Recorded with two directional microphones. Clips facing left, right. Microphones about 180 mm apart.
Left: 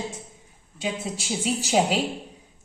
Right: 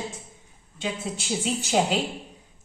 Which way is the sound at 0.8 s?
5° left (ahead or behind).